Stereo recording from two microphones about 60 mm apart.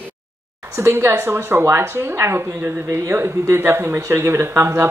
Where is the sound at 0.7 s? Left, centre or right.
Right.